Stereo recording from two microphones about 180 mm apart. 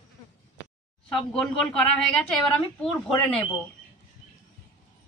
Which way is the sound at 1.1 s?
5° left (ahead or behind).